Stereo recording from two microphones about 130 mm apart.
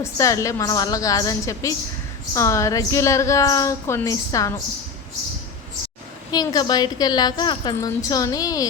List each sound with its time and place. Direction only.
0.0 s a woman's voice: 25° left (ahead or behind)
6.3 s a woman's voice: 30° left (ahead or behind)